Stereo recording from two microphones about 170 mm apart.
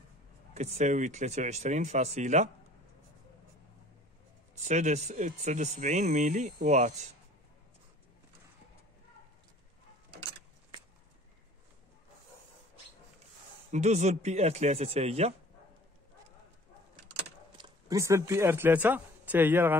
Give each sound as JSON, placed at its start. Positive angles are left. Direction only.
{"t": 0.6, "sound": "speech", "side_deg": -40}
{"t": 4.6, "sound": "speech", "side_deg": -45}
{"t": 13.7, "sound": "speech", "side_deg": -40}
{"t": 17.6, "sound": "speech", "side_deg": -20}